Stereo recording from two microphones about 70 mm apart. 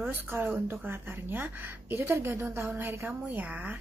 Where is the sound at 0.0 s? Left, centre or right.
Right.